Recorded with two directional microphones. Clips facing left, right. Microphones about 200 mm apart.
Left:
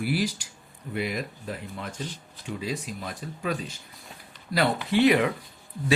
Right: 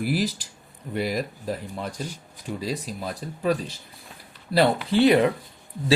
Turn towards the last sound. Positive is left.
turn(degrees=-30)  # may be behind; listen again after turning